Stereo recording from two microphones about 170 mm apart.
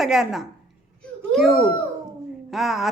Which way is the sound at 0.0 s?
Centre (ahead or behind).